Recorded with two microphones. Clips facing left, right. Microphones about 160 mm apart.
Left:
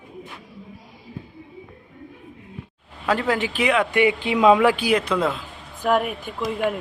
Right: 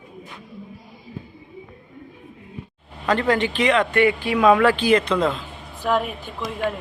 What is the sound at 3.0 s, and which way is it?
Speech, 5° left (ahead or behind).